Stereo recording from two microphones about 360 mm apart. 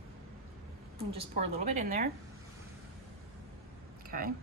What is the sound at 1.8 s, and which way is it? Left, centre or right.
Speech, right.